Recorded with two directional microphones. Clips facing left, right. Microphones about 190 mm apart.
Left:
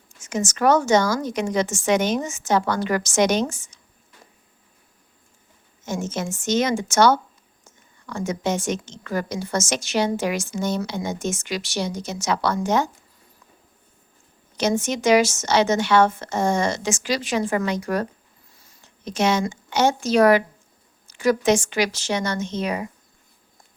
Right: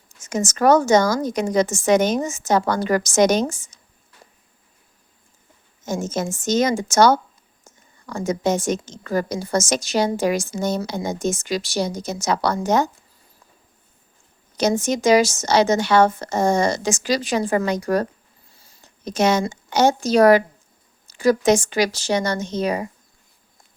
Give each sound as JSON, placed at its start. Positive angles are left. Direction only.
{"t": 0.2, "sound": "a woman's voice", "side_deg": -40}
{"t": 5.8, "sound": "a woman's voice", "side_deg": -40}
{"t": 14.5, "sound": "a woman's voice", "side_deg": -40}